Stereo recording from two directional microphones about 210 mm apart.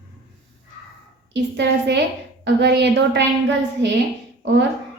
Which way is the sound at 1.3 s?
55° right (ahead or behind).